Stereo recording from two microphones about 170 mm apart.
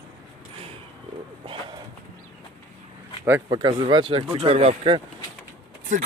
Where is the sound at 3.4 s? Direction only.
25° right (ahead or behind).